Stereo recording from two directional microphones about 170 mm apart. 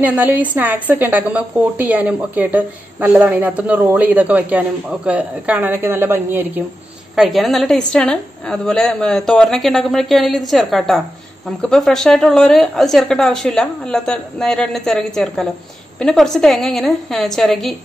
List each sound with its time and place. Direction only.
0.0 s a woman's voice: 10° right (ahead or behind)
7.2 s a woman's voice: centre (ahead or behind)